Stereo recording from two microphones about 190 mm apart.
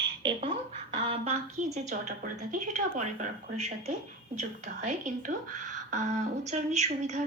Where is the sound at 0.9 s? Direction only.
30° right (ahead or behind).